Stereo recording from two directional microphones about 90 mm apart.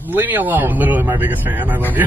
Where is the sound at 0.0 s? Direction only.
20° right (ahead or behind).